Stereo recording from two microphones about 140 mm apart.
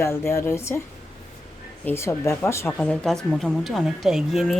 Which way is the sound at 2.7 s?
5° left (ahead or behind).